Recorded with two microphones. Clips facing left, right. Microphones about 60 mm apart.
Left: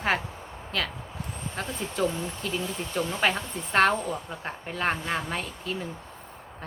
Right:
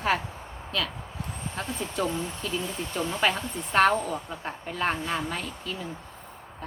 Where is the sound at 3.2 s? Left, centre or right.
Left.